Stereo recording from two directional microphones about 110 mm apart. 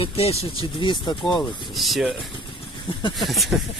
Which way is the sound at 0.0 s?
65° left (ahead or behind).